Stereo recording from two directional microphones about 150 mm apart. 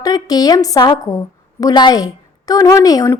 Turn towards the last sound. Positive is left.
turn(degrees=20)  # may be behind; listen again after turning